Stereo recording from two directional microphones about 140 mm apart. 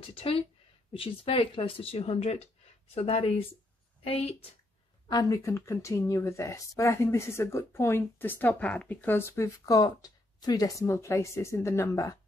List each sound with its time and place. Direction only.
0.0 s a woman's voice: 40° left (ahead or behind)
5.1 s speech: 20° left (ahead or behind)